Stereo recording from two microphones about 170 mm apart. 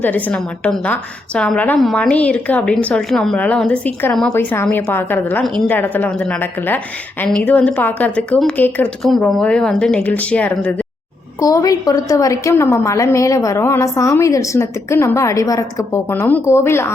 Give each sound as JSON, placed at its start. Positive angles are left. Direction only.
{"t": 0.0, "sound": "a woman's voice", "side_deg": 10}
{"t": 11.3, "sound": "a woman's voice", "side_deg": 20}